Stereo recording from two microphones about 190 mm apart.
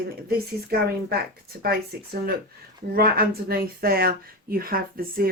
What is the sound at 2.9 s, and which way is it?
A woman's voice, 55° right (ahead or behind).